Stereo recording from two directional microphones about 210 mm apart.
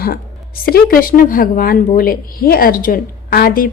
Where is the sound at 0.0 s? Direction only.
45° left (ahead or behind).